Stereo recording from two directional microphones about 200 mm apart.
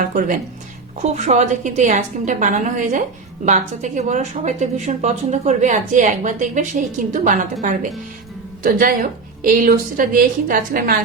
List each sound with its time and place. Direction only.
0.0 s a woman's voice: 40° right (ahead or behind)